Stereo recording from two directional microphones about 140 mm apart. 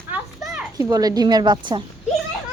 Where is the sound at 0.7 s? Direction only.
25° right (ahead or behind).